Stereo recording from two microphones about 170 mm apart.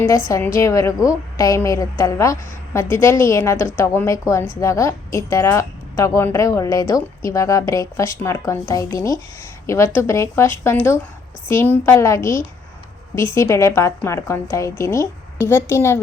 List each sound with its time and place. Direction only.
0.3 s a woman's voice: 15° left (ahead or behind)